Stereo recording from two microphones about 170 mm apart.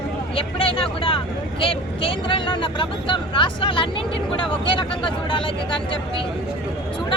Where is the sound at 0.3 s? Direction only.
35° left (ahead or behind).